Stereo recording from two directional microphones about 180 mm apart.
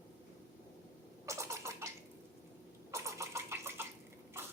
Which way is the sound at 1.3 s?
15° right (ahead or behind).